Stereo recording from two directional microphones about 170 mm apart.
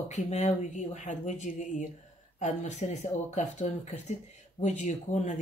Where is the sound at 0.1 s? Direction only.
40° left (ahead or behind).